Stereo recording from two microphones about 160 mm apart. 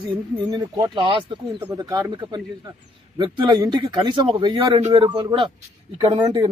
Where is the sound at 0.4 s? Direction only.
25° right (ahead or behind).